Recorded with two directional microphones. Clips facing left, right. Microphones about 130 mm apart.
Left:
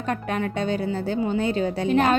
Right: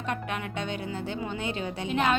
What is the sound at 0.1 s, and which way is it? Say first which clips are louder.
A woman's voice: left 7 dB; 40° left (ahead or behind).